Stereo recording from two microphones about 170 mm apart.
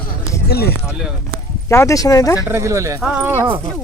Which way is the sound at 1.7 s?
15° left (ahead or behind).